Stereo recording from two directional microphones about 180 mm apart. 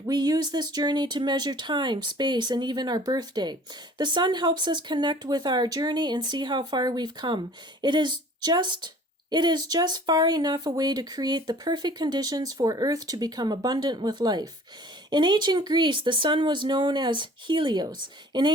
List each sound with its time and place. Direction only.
0.0 s speech: 20° right (ahead or behind)